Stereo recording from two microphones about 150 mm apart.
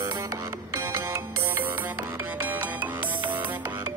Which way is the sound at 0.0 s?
20° right (ahead or behind).